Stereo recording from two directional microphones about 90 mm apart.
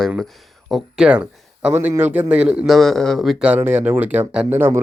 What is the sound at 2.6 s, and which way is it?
Speech, 5° left (ahead or behind).